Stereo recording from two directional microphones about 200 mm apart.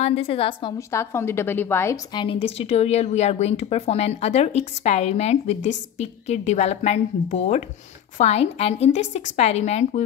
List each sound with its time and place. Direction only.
0.0 s a woman's voice: 30° left (ahead or behind)
0.7 s a woman's voice: 15° left (ahead or behind)
2.2 s a woman's voice: 30° left (ahead or behind)